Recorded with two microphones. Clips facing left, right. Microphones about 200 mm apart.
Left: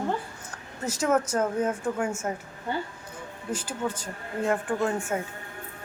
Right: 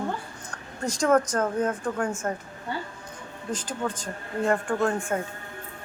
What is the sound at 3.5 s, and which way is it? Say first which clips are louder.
Speech: even; 10° left (ahead or behind).